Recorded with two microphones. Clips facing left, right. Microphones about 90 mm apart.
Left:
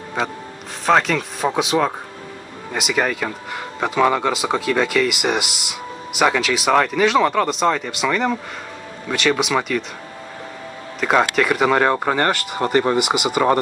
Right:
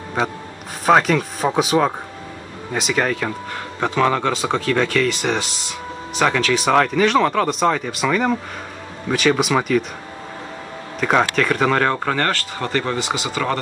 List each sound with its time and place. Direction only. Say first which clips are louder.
0.8 s speech: right 2 dB; 5° right (ahead or behind)
11.0 s speech: even; centre (ahead or behind); by 13.6 s 20° left (ahead or behind)